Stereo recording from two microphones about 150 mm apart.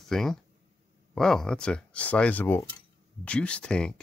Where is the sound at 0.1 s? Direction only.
5° left (ahead or behind).